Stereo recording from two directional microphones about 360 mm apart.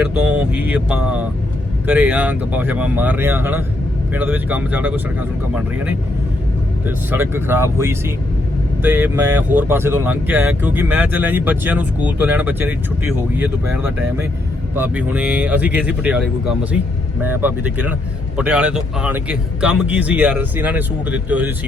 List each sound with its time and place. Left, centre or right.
0.0 s speech: centre
6.8 s speech: centre